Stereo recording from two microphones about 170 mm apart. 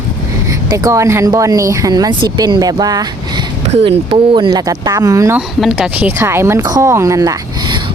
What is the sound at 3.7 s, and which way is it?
Speech, 35° right (ahead or behind).